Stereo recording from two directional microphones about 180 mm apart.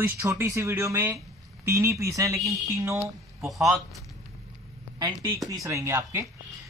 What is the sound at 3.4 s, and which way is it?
Speech, centre (ahead or behind).